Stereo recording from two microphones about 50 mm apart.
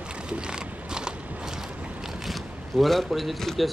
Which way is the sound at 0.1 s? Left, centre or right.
Centre.